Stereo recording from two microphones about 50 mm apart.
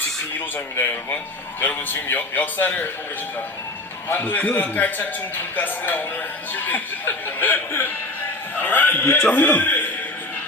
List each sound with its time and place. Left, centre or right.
0.3 s speech: left
4.2 s speech: left